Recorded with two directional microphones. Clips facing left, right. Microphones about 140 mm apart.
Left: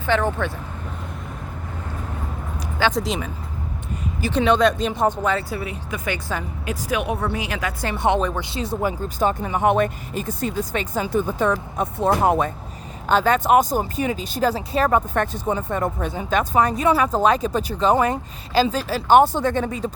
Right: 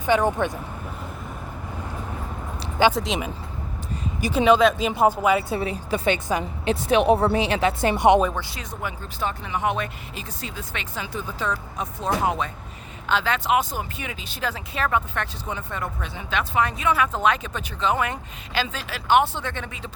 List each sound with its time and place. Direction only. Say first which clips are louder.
0.0 s speech: right 1 dB; 15° right (ahead or behind)
2.6 s a sound: right 3 dB; 20° right (ahead or behind)
2.9 s speech: left 2 dB; centre (ahead or behind)
4.2 s speech: even; 10° right (ahead or behind)
5.5 s speech: right 3 dB; 30° right (ahead or behind)
8.4 s speech: left 7 dB; 25° left (ahead or behind)